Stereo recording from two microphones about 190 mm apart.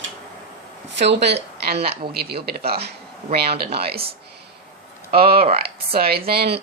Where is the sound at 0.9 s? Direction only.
65° right (ahead or behind).